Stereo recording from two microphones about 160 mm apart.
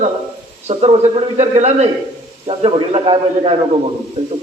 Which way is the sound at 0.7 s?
35° right (ahead or behind).